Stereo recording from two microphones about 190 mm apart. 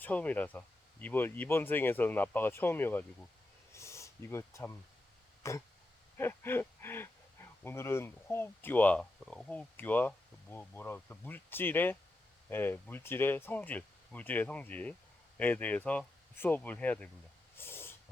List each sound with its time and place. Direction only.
0.0 s speech: 10° left (ahead or behind)
3.8 s a sound: 15° left (ahead or behind)
7.6 s speech: 15° left (ahead or behind)
17.6 s hiss: 10° left (ahead or behind)